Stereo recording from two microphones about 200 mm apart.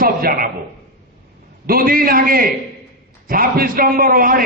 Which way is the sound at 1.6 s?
45° right (ahead or behind).